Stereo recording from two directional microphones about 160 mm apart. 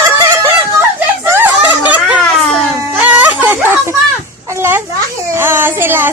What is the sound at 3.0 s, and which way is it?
Wail, 10° right (ahead or behind).